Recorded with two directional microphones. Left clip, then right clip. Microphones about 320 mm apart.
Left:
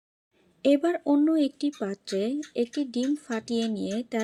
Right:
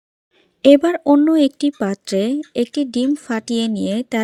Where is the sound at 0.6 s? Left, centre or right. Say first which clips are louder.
Right 11 dB; right.